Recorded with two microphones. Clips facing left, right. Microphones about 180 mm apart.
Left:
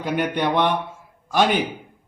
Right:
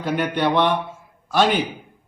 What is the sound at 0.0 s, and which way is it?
Speech, 15° left (ahead or behind).